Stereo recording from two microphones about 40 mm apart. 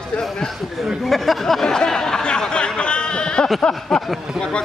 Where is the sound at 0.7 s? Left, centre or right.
Centre; by 3.8 s left.